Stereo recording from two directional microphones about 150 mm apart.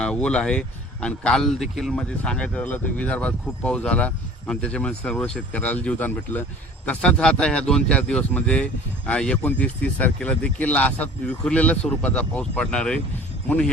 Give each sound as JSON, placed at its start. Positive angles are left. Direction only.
{"t": 0.0, "sound": "speech", "side_deg": 5}